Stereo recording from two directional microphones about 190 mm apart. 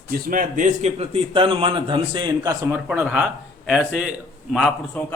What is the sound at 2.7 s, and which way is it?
A man's voice, 10° right (ahead or behind).